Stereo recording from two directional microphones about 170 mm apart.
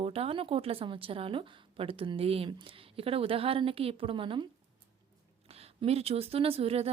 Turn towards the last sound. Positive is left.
turn(degrees=-35)  # may be behind; listen again after turning